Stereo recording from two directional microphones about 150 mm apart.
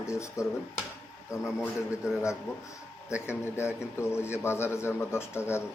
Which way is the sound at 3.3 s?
15° left (ahead or behind).